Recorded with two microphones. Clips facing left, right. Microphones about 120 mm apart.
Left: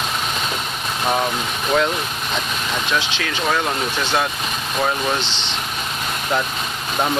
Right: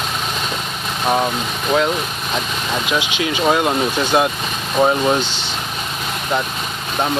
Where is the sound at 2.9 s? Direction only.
15° right (ahead or behind).